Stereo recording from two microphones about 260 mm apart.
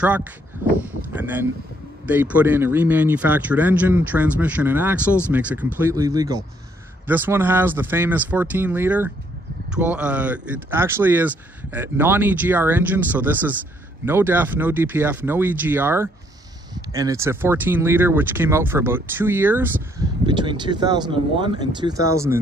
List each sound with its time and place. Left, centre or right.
0.0 s speech: centre
20.2 s speech: centre